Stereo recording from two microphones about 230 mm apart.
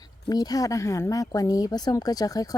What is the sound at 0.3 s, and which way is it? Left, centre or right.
Speech, centre.